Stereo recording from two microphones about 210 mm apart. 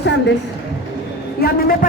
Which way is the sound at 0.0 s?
60° left (ahead or behind).